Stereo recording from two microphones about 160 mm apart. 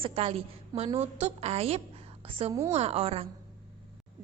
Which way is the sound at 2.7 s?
40° right (ahead or behind).